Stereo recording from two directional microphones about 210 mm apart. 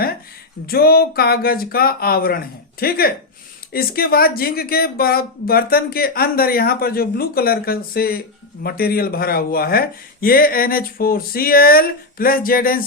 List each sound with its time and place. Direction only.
0.7 s speech: 45° left (ahead or behind)